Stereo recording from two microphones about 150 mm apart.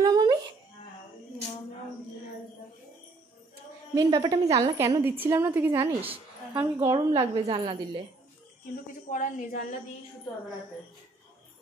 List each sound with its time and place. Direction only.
0.0 s a sound: 25° right (ahead or behind)
3.9 s a woman's voice: 25° right (ahead or behind)
5.7 s a woman's voice: 40° right (ahead or behind)
6.5 s a woman's voice: 15° right (ahead or behind)
7.2 s a woman's voice: 40° right (ahead or behind)
9.1 s a woman's voice: 65° left (ahead or behind)